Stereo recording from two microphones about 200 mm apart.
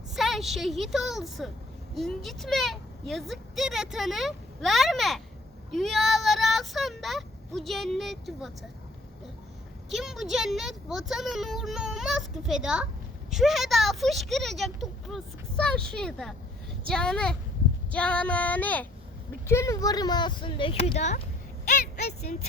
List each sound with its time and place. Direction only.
0.2 s speech: centre (ahead or behind)
5.7 s child singing: centre (ahead or behind)
9.9 s speech: centre (ahead or behind)
17.9 s female singing: 5° left (ahead or behind)
19.5 s speech: 15° left (ahead or behind); by 21.2 s 35° left (ahead or behind)